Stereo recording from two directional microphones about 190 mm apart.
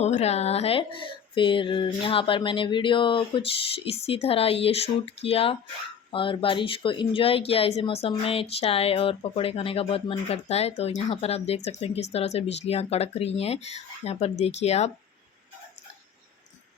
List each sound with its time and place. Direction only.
0.0 s speech: 35° left (ahead or behind)